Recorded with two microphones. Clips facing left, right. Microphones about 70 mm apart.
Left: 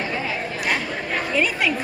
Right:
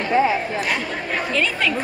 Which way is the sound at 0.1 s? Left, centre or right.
Right.